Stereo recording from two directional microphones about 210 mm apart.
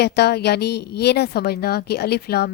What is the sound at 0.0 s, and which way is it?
A woman's voice, 50° left (ahead or behind).